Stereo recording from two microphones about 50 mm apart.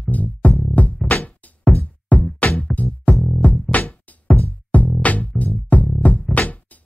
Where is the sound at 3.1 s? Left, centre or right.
Centre.